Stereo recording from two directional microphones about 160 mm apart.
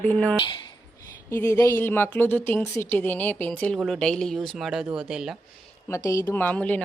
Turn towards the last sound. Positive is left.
turn(degrees=10)  # may be behind; listen again after turning